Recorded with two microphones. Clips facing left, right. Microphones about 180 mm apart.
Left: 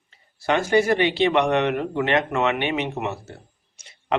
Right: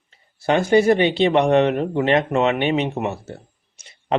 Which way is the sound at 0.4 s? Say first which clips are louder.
Right 4 dB; 30° right (ahead or behind).